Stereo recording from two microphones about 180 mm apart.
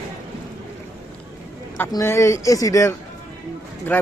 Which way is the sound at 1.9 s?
15° left (ahead or behind).